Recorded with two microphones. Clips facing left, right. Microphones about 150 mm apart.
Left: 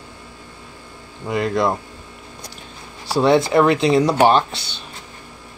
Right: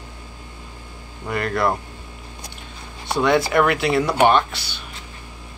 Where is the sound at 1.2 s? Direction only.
20° left (ahead or behind).